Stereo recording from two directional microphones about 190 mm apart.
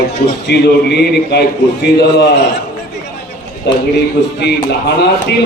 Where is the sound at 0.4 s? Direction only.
60° left (ahead or behind).